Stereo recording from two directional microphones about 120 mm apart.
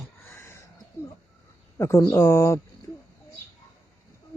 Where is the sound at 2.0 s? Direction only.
20° left (ahead or behind).